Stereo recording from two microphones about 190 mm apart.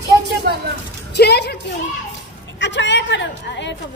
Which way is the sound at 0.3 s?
55° right (ahead or behind).